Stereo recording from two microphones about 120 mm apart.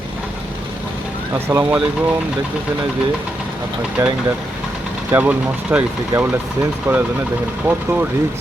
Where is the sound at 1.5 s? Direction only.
20° right (ahead or behind).